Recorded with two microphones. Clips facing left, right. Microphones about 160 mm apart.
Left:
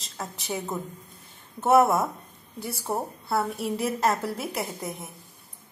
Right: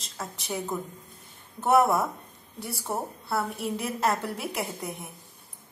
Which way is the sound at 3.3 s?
Centre (ahead or behind).